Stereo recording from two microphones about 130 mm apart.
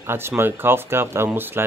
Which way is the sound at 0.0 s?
20° right (ahead or behind).